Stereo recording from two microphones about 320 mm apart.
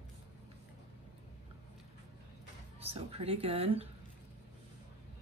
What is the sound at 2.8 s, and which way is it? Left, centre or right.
Speech, centre.